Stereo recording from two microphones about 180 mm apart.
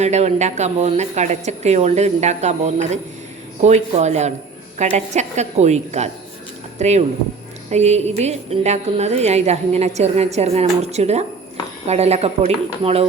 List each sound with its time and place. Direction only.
0.0 s speech: 40° right (ahead or behind)